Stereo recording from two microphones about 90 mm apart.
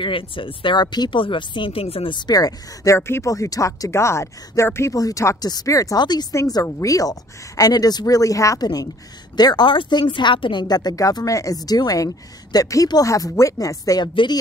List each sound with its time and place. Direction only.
0.0 s speech: 75° left (ahead or behind); by 1.2 s 55° left (ahead or behind)
1.2 s a woman's voice: 70° left (ahead or behind); by 6.2 s 50° left (ahead or behind)
6.3 s a woman's voice: 35° left (ahead or behind)
14.0 s speech: 55° left (ahead or behind)